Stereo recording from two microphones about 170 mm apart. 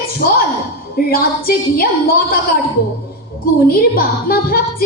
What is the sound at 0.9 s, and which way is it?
A woman's voice, 60° left (ahead or behind).